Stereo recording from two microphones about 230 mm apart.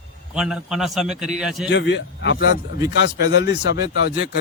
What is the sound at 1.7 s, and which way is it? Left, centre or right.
Speech, left.